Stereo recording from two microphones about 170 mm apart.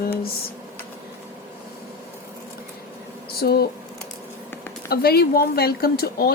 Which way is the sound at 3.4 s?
65° left (ahead or behind).